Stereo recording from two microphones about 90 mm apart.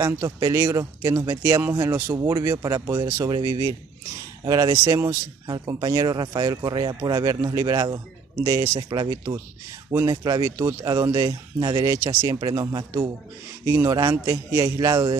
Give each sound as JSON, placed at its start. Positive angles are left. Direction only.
{"t": 0.0, "sound": "speech", "side_deg": -35}
{"t": 12.4, "sound": "speech", "side_deg": -50}
{"t": 13.7, "sound": "speech", "side_deg": -35}